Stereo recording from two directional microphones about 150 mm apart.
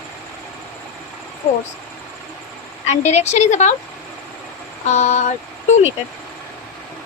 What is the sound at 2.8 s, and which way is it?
Speech, 50° left (ahead or behind).